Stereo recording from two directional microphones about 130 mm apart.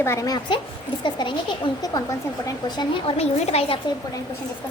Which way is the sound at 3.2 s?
55° left (ahead or behind).